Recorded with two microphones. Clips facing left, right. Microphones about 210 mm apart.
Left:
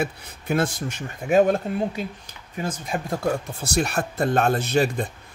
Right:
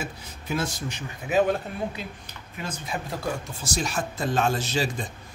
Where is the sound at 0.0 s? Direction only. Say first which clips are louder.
Left 8 dB; 55° left (ahead or behind).